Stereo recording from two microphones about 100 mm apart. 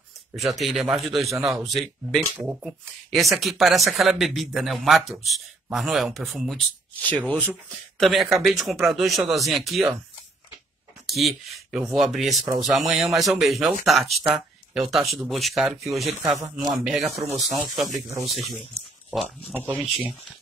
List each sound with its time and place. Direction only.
0.4 s speech: centre (ahead or behind)
2.0 s speech: 10° right (ahead or behind)
2.6 s speech: centre (ahead or behind)
7.0 s speech: 15° left (ahead or behind)
8.0 s speech: centre (ahead or behind)
11.1 s speech: centre (ahead or behind)
19.5 s speech: 20° right (ahead or behind)